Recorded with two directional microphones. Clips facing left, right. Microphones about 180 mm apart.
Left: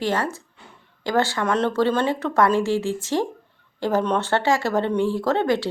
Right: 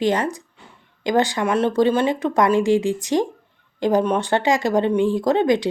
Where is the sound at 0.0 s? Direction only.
15° right (ahead or behind).